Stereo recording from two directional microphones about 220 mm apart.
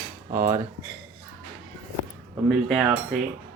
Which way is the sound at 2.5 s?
Centre (ahead or behind).